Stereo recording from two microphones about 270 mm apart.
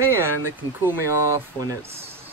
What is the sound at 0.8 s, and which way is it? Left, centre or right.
Speech, centre.